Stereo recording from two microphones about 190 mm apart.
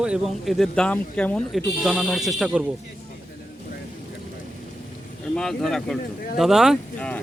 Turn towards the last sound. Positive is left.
turn(degrees=5)  # may be behind; listen again after turning